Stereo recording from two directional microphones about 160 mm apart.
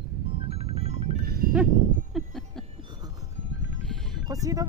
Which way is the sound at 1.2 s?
70° right (ahead or behind).